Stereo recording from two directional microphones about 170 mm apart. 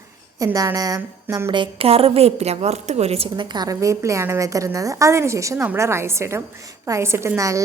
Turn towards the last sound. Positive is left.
turn(degrees=-20)  # may be behind; listen again after turning